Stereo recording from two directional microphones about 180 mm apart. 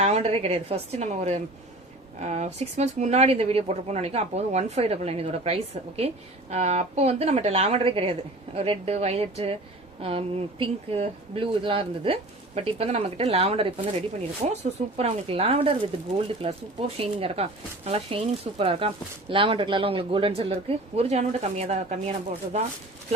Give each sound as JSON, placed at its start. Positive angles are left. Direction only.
{"t": 0.0, "sound": "speech", "side_deg": -35}